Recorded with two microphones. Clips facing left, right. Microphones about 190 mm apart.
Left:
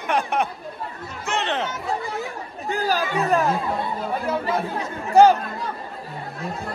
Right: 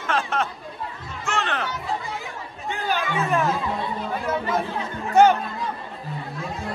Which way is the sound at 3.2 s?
35° left (ahead or behind).